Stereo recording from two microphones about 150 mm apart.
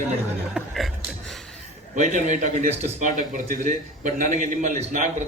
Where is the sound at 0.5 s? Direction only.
Centre (ahead or behind).